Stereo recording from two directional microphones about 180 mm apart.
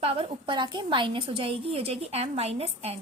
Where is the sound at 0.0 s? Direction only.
30° right (ahead or behind).